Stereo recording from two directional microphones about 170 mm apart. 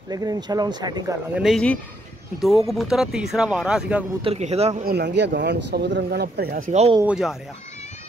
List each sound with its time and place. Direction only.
0.1 s speech: 20° right (ahead or behind)
1.3 s speech: centre (ahead or behind)
4.2 s a man's voice: 35° right (ahead or behind)
4.8 s speech: 80° right; by 6.9 s 45° right (ahead or behind)